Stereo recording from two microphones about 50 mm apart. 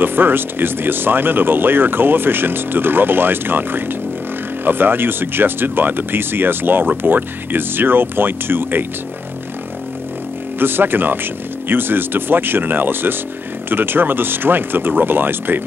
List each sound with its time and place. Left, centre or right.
0.0 s speech: right
10.6 s speech: right